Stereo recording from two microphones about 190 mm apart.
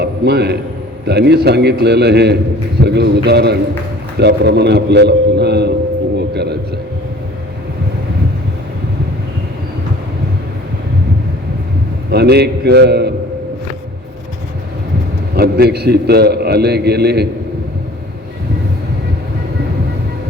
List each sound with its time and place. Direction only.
0.0 s a man's voice: 60° right (ahead or behind)
6.1 s a sound: 60° right (ahead or behind)
12.1 s a man's voice: 60° right (ahead or behind)
15.4 s a man's voice: 55° right (ahead or behind)